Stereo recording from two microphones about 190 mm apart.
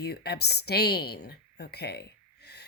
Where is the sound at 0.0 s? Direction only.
55° left (ahead or behind).